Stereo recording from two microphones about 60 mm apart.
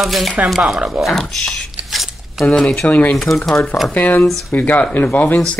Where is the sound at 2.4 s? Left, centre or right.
Centre.